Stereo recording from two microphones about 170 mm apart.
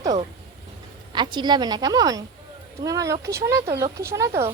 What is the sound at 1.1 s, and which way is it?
Speech, 25° right (ahead or behind).